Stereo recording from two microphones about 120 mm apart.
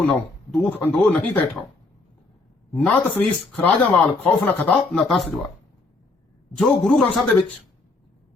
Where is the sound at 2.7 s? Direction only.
10° left (ahead or behind).